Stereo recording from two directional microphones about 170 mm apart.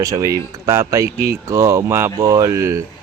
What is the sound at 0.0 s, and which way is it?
Speech, 20° right (ahead or behind).